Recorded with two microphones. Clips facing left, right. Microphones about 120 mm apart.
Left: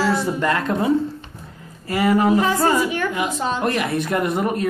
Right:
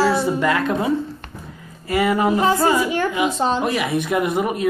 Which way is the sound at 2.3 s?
30° right (ahead or behind).